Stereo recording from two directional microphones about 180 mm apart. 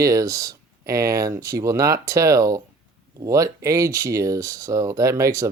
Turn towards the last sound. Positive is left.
turn(degrees=-15)  # may be behind; listen again after turning